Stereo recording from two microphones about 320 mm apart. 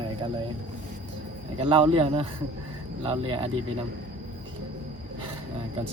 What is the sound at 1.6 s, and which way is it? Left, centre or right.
Speech, centre.